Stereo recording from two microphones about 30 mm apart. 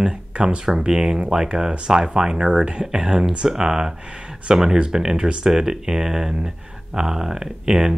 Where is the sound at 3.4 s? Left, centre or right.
Centre; by 5.4 s right.